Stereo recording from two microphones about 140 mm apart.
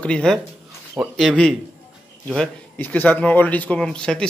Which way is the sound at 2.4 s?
15° left (ahead or behind).